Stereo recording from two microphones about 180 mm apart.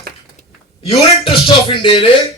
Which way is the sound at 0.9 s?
30° left (ahead or behind).